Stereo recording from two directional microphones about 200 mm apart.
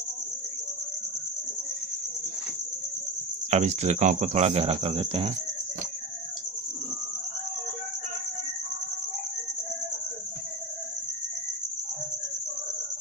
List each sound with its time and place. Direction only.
3.5 s cricket: 35° right (ahead or behind)